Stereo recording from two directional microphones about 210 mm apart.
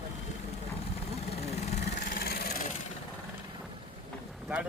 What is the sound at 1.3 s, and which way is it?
Vehicle, 30° left (ahead or behind).